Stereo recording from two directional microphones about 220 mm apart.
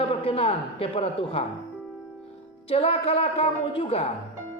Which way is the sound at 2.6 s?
25° left (ahead or behind).